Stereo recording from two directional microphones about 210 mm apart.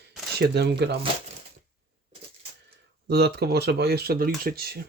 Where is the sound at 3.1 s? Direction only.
50° right (ahead or behind).